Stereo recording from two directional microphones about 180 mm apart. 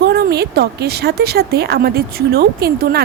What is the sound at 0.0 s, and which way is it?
A woman's voice, 65° right (ahead or behind).